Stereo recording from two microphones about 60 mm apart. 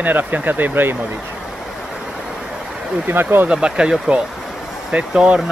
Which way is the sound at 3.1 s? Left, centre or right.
Right.